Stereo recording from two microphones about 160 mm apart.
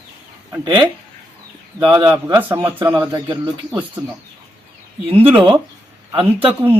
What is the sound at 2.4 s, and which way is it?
Speech, 15° right (ahead or behind).